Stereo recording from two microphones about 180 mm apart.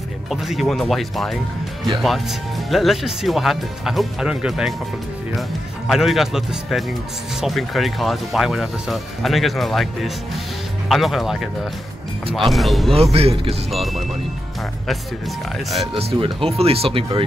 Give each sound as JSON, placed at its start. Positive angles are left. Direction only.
{"t": 0.3, "sound": "speech", "side_deg": 0}
{"t": 5.9, "sound": "speech", "side_deg": 0}
{"t": 12.9, "sound": "speech", "side_deg": -35}
{"t": 13.7, "sound": "speech", "side_deg": 0}
{"t": 16.0, "sound": "speech", "side_deg": -30}